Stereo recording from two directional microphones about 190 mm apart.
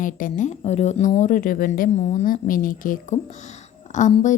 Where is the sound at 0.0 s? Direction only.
45° left (ahead or behind).